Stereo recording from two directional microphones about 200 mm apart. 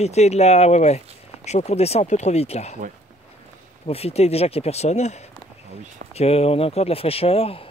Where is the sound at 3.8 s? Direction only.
30° left (ahead or behind).